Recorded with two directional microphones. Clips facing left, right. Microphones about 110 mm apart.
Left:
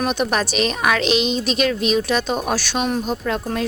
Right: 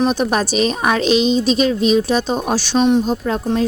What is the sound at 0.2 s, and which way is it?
A woman's voice, 35° right (ahead or behind).